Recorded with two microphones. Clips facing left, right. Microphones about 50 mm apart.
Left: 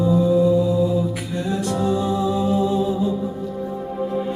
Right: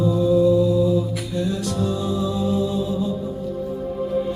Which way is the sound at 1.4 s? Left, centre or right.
Left.